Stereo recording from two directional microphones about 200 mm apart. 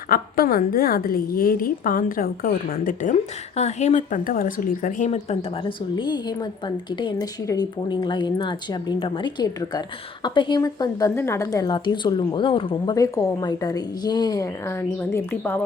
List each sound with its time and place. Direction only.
0.1 s a woman's voice: 45° left (ahead or behind); by 15.6 s 10° left (ahead or behind)